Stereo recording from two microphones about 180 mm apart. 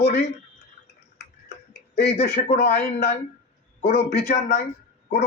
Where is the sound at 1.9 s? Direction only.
60° left (ahead or behind).